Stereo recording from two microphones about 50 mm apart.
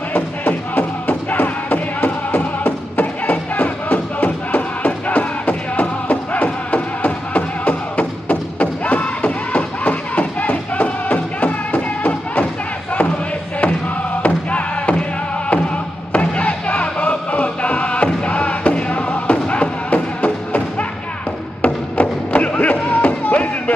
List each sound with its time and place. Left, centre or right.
0.1 s music: left
14.2 s music: left
16.1 s music: left